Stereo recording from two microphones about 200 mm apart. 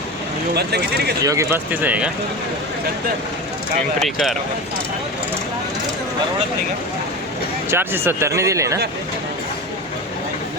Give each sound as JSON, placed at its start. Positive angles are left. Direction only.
{"t": 0.5, "sound": "speech", "side_deg": -55}
{"t": 1.2, "sound": "speech", "side_deg": -15}
{"t": 4.0, "sound": "speech", "side_deg": 0}
{"t": 7.7, "sound": "speech", "side_deg": -10}